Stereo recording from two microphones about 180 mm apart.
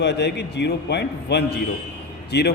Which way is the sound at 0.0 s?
70° left (ahead or behind).